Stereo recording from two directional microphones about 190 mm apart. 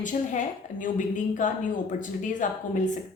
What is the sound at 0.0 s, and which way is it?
A woman's voice, 40° left (ahead or behind).